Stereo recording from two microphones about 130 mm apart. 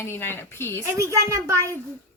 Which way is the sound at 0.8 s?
25° right (ahead or behind).